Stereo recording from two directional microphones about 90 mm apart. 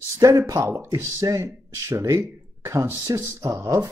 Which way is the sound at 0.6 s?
25° right (ahead or behind).